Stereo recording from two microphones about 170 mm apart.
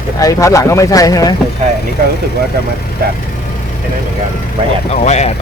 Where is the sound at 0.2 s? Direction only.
20° left (ahead or behind).